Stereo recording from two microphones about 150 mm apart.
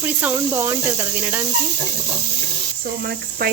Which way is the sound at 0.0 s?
15° right (ahead or behind).